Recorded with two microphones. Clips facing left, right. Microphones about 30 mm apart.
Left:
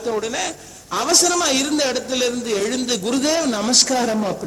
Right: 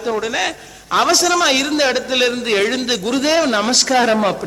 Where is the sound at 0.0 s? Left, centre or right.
Right.